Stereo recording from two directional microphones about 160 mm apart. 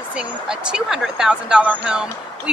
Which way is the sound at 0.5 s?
5° right (ahead or behind).